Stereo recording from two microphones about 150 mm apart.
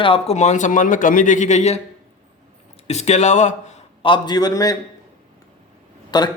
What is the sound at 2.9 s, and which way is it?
Speech, 45° left (ahead or behind).